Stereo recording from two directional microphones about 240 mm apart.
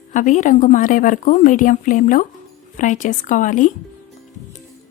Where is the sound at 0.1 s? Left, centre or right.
Left.